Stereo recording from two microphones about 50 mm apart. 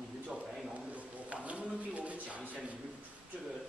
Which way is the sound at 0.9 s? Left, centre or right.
Right.